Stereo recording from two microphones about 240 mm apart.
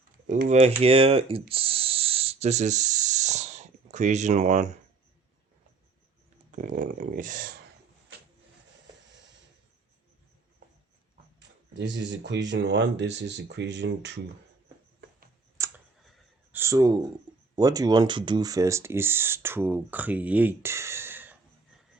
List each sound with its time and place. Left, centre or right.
0.3 s speech: right
6.6 s speech: right
11.3 s a sound: right
12.5 s speech: right
15.6 s clicking: centre
16.5 s a sound: centre
17.5 s speech: centre